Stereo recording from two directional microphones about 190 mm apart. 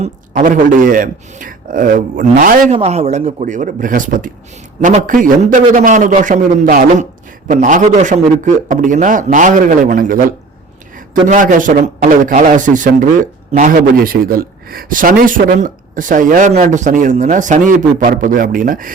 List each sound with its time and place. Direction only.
0.0 s a man's voice: 40° right (ahead or behind)
2.7 s a man's voice: 35° right (ahead or behind)